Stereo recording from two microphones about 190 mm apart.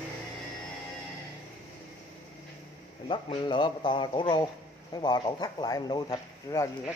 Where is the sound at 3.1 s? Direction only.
25° left (ahead or behind).